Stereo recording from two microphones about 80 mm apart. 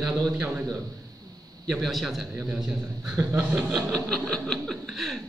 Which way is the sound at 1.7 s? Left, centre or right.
Centre.